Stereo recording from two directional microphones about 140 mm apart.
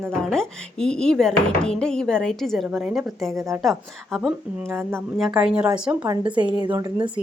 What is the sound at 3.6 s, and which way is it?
Speech, centre (ahead or behind).